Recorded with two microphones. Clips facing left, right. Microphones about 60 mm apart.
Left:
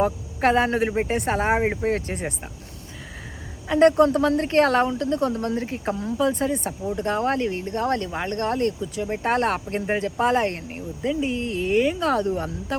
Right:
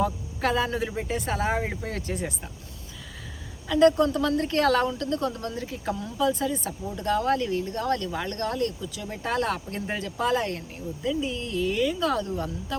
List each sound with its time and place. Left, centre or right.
0.0 s a woman's voice: left
3.7 s a woman's voice: left